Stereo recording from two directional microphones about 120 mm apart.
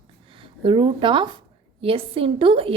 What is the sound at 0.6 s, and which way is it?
A woman's voice, 45° right (ahead or behind).